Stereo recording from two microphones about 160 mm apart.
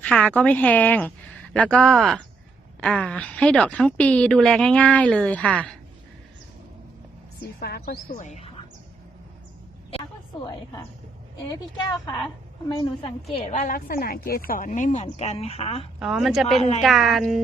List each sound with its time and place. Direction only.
0.0 s a woman's voice: 5° left (ahead or behind)
7.6 s speech: 75° left (ahead or behind)
8.1 s speech: 50° left (ahead or behind)
8.4 s a sound: 35° left (ahead or behind)
10.4 s a woman's voice: 25° left (ahead or behind)
13.6 s speech: 60° left (ahead or behind); by 15.9 s 40° left (ahead or behind)
16.0 s speech: centre (ahead or behind)
16.6 s speech: 45° left (ahead or behind)
16.8 s speech: centre (ahead or behind)